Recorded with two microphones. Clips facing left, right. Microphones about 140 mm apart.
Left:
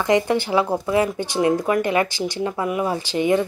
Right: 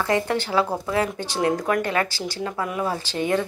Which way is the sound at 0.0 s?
15° left (ahead or behind).